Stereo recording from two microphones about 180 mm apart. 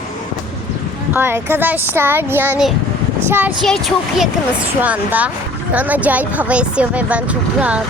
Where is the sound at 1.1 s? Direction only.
10° right (ahead or behind).